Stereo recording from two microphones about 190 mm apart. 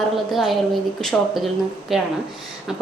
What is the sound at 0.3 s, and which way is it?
A woman's voice, centre (ahead or behind).